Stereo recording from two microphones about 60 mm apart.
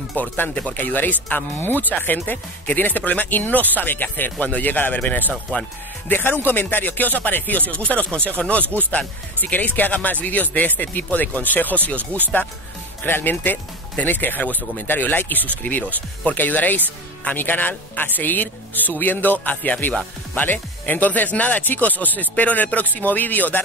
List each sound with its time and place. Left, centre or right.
0.1 s speech: left
13.0 s speech: left